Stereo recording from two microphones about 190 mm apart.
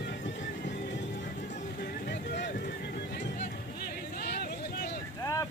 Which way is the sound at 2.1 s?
60° left (ahead or behind).